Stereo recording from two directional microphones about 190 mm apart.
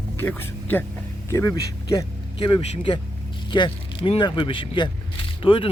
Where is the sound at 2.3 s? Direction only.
30° left (ahead or behind).